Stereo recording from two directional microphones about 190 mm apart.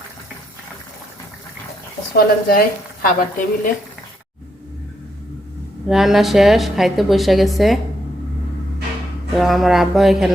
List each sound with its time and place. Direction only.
2.1 s speech: 50° left (ahead or behind)
5.9 s a woman's voice: centre (ahead or behind)
9.3 s a woman's voice: centre (ahead or behind)